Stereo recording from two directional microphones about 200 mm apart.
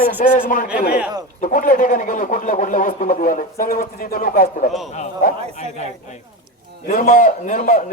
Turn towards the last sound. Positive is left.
turn(degrees=40)  # may be behind; listen again after turning